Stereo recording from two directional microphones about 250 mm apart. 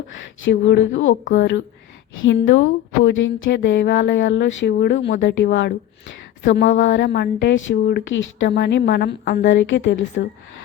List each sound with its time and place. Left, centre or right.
0.4 s a woman's voice: left